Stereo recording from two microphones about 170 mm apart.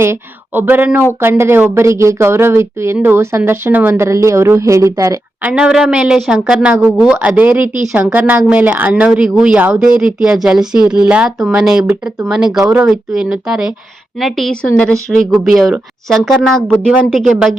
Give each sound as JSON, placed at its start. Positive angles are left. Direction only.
{"t": 0.0, "sound": "speech", "side_deg": -15}
{"t": 5.5, "sound": "speech", "side_deg": -5}